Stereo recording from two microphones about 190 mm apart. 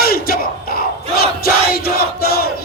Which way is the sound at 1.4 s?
55° left (ahead or behind).